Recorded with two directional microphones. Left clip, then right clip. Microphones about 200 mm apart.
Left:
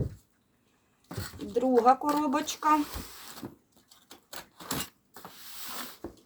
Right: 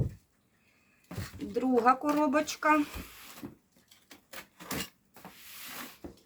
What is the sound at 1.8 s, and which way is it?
Speech, 5° right (ahead or behind).